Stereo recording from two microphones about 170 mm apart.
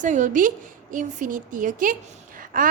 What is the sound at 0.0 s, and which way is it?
A woman's voice, 45° right (ahead or behind).